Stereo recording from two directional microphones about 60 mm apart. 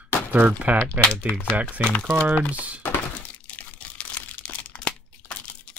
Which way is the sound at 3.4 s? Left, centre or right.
Left.